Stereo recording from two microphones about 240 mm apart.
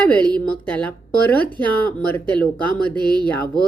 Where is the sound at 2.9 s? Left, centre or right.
Centre.